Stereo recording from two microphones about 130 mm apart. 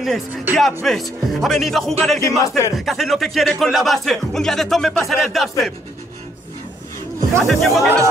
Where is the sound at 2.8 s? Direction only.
Centre (ahead or behind).